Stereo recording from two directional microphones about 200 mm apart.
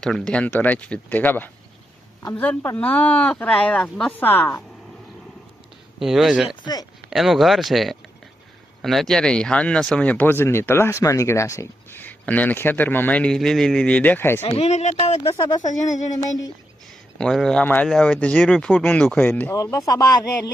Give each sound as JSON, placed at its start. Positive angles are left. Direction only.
{"t": 0.0, "sound": "speech", "side_deg": 5}
{"t": 6.0, "sound": "speech", "side_deg": 0}
{"t": 14.4, "sound": "speech", "side_deg": 30}
{"t": 17.2, "sound": "speech", "side_deg": 5}